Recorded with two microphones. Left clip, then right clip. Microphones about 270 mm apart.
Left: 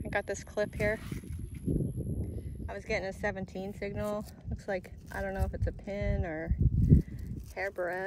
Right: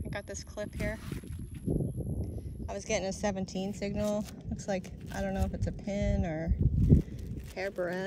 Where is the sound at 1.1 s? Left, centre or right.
Right.